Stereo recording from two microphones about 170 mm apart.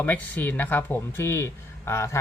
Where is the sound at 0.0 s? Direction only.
10° left (ahead or behind).